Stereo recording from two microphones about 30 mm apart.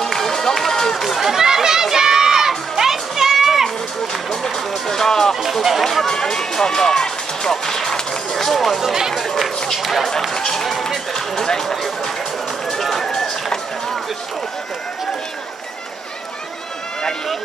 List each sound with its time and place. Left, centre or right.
0.0 s run: centre
1.0 s chatter: centre
1.3 s a sound: centre
2.8 s music: centre
4.1 s vehicle: centre
4.8 s music: centre
5.3 s music: centre
5.9 s run: centre
6.1 s music: centre
7.9 s run: centre
9.8 s speech: centre
10.3 s speech: centre
11.6 s speech: centre
12.6 s run: centre